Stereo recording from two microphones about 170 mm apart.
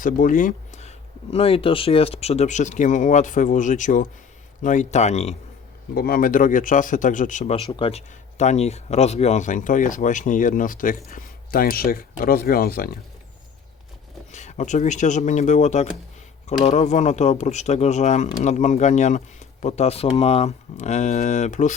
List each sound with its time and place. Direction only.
0.0 s speech: 50° left (ahead or behind)
5.9 s speech: 60° left (ahead or behind)
7.5 s speech: 35° left (ahead or behind); by 12.9 s 60° left (ahead or behind)
14.3 s speech: 45° left (ahead or behind)